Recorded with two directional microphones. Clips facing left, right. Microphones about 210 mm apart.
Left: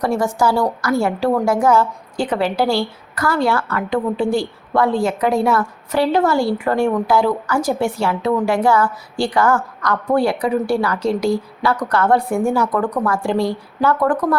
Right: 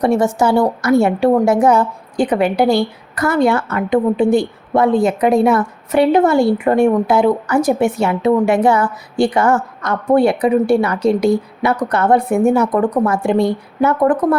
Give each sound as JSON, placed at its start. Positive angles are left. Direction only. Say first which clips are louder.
{"t": 0.0, "sound": "a woman's voice", "louder": "right 4 dB", "side_deg": -25}